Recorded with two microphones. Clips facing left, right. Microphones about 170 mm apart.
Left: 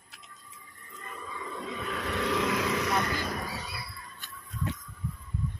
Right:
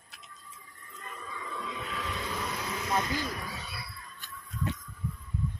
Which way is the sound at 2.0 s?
65° left (ahead or behind).